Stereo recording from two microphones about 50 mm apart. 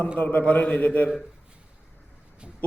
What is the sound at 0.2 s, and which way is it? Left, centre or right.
Speech, left.